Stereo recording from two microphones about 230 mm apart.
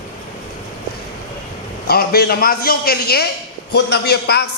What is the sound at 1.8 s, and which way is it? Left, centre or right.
A man's voice, left.